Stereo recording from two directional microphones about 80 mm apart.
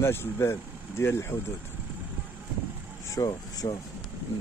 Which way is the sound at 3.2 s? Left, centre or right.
Left.